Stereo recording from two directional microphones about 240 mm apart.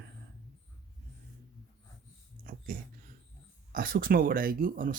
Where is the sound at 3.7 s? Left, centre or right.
Right.